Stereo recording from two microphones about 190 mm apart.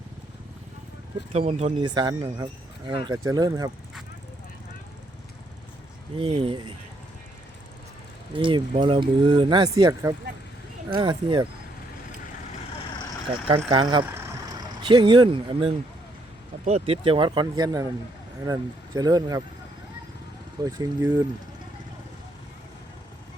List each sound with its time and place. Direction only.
1.3 s speech: 35° right (ahead or behind)
6.1 s speech: 25° right (ahead or behind)
8.3 s speech: 25° right (ahead or behind)
13.5 s speech: 25° right (ahead or behind)
20.7 s speech: 20° right (ahead or behind)